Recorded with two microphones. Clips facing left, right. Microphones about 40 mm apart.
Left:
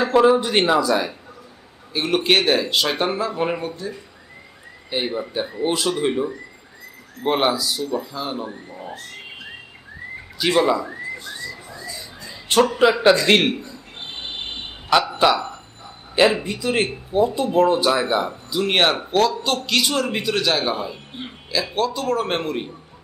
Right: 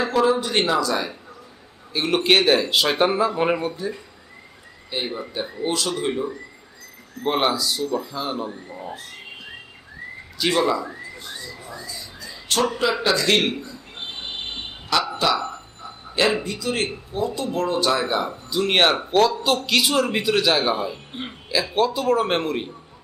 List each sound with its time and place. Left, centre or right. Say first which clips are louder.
0.0 s speech: left 4 dB; left
1.9 s speech: even; centre
4.9 s speech: left 4 dB; centre
5.5 s speech: left 3 dB; left; by 8.4 s centre
10.5 s speech: left 3 dB; centre
12.2 s a sound: left 6 dB; left
12.8 s speech: left 6 dB; left
15.0 s speech: left 4 dB; left
16.1 s speech: left 4 dB; centre
17.8 s speech: left 2 dB; centre